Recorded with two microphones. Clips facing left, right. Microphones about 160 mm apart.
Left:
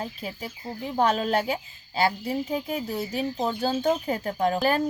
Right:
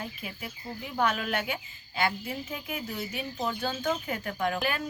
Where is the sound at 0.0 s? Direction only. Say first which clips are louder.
Left 5 dB; 35° left (ahead or behind).